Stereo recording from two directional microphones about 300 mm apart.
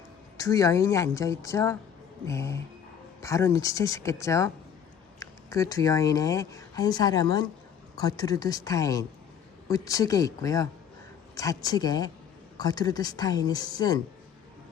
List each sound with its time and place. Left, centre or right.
0.3 s a woman's voice: centre